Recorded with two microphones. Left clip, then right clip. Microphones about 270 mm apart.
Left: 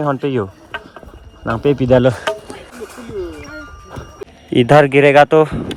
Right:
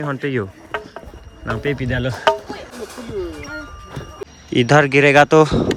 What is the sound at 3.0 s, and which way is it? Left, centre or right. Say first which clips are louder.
Music: left 1 dB; centre.